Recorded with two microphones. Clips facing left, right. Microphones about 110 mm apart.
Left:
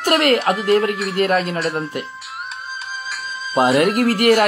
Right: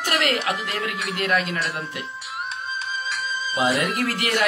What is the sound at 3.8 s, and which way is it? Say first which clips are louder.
Speech: left 9 dB; 60° left (ahead or behind).